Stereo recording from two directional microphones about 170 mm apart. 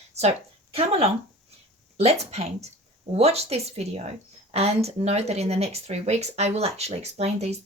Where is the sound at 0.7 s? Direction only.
35° right (ahead or behind).